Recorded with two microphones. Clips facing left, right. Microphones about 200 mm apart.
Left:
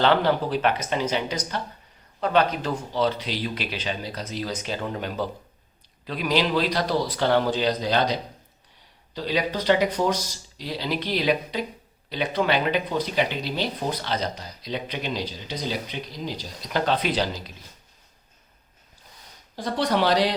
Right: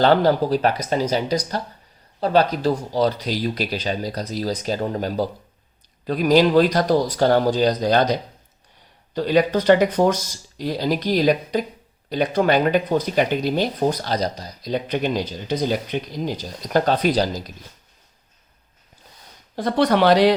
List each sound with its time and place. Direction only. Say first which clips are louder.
0.0 s speech: right 4 dB; 40° right (ahead or behind)
9.1 s speech: right 8 dB; 50° right (ahead or behind)
19.5 s speech: right 6 dB; 55° right (ahead or behind)